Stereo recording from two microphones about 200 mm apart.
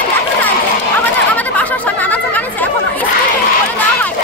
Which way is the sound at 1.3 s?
5° left (ahead or behind).